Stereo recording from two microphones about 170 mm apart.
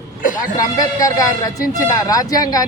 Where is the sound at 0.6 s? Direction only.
20° left (ahead or behind).